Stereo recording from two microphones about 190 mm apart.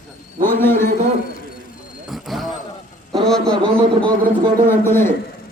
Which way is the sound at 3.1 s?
Centre (ahead or behind).